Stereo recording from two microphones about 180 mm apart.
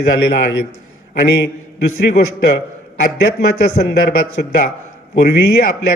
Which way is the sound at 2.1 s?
65° left (ahead or behind).